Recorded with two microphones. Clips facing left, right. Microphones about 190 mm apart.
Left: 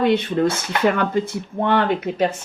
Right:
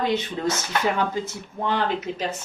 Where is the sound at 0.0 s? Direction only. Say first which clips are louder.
Left 7 dB; 55° left (ahead or behind).